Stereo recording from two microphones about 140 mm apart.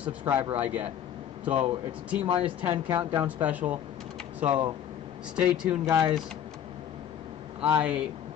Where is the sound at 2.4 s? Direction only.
10° right (ahead or behind).